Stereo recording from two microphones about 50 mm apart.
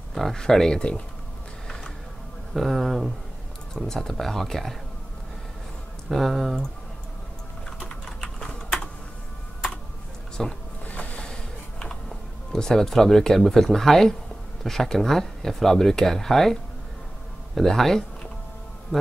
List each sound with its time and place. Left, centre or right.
0.1 s speech: centre
2.5 s speech: centre
3.7 s speech: centre
6.0 s speech: centre
8.2 s typing: centre
10.4 s speech: centre
10.9 s boat: left
12.5 s speech: centre
17.6 s speech: centre